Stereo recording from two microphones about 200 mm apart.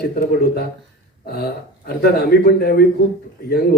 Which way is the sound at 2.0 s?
50° left (ahead or behind).